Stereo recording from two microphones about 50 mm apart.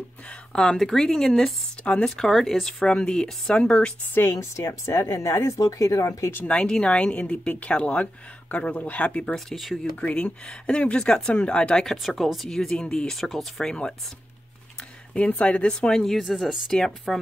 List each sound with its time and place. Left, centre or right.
0.3 s a sound: centre
0.7 s speech: centre
1.8 s speech: left
2.0 s speech: centre
2.9 s speech: centre
4.1 s speech: left
6.4 s speech: left
9.2 s speech: centre
9.9 s speech: left
11.9 s speech: centre
13.1 s speech: centre
15.1 s speech: left
16.0 s speech: centre